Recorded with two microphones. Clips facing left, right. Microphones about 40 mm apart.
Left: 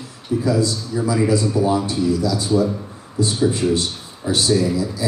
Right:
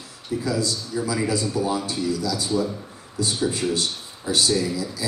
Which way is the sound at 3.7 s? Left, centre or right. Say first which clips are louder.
Left 3 dB; left.